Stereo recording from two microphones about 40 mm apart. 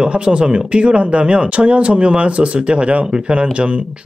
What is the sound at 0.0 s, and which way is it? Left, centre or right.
Speech, right.